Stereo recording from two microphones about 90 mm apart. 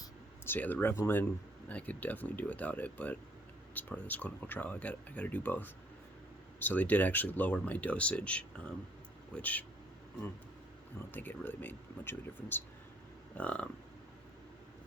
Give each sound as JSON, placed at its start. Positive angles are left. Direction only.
{"t": 0.4, "sound": "speech", "side_deg": 20}
{"t": 11.1, "sound": "speech", "side_deg": 20}